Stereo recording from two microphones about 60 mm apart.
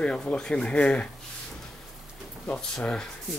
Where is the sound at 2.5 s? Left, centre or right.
Centre.